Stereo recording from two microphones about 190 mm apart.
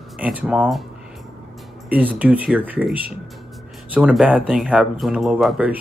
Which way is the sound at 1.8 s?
10° right (ahead or behind).